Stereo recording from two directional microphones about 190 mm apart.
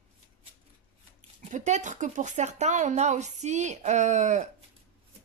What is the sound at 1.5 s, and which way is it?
Speech, 40° right (ahead or behind).